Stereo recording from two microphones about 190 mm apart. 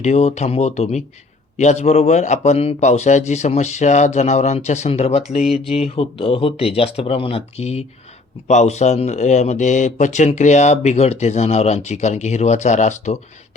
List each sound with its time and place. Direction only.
0.0 s speech: 35° left (ahead or behind)